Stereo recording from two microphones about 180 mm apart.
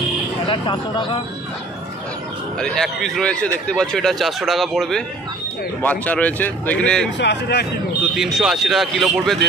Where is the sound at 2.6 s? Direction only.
5° left (ahead or behind).